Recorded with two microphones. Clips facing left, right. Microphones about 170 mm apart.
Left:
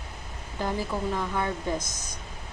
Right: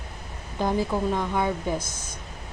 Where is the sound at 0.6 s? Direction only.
15° right (ahead or behind).